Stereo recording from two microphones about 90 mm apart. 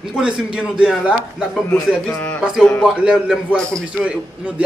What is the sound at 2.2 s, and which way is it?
Speech, 10° left (ahead or behind).